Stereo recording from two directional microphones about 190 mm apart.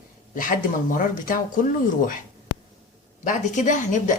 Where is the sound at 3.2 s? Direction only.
40° left (ahead or behind).